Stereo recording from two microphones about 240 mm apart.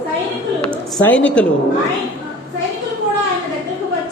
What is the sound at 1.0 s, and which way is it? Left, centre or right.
Speech, centre.